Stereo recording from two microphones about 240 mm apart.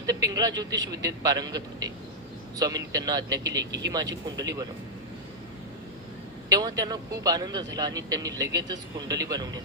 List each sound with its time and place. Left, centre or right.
0.1 s a man's voice: centre
6.5 s a man's voice: centre